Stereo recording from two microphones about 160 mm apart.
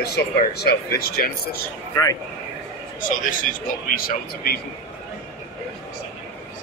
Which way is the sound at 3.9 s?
65° left (ahead or behind).